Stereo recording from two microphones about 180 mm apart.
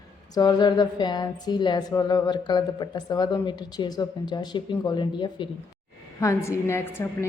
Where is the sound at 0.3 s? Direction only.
20° left (ahead or behind).